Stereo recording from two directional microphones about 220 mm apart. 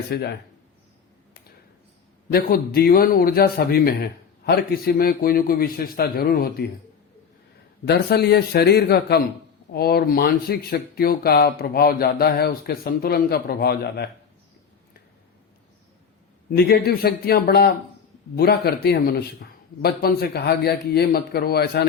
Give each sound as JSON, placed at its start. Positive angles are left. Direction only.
{"t": 0.1, "sound": "speech", "side_deg": 50}
{"t": 2.3, "sound": "speech", "side_deg": 45}
{"t": 7.9, "sound": "speech", "side_deg": 45}
{"t": 16.5, "sound": "speech", "side_deg": 45}